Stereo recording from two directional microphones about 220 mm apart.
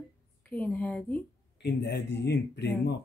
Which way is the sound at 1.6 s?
50° left (ahead or behind).